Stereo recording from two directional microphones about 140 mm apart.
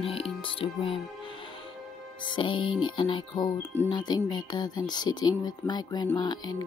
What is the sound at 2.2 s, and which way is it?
Speech, 35° left (ahead or behind).